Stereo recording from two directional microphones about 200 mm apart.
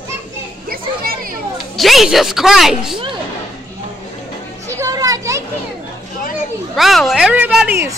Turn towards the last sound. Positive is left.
turn(degrees=-10)  # may be behind; listen again after turning